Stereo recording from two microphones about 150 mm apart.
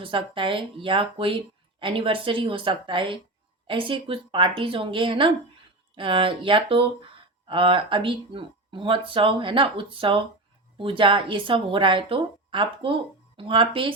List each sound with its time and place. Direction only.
0.0 s speech: 35° right (ahead or behind)